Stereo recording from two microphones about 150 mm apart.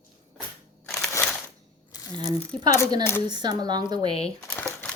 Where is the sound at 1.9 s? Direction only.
25° left (ahead or behind).